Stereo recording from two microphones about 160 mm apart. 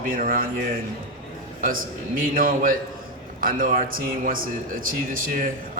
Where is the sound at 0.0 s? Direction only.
60° right (ahead or behind).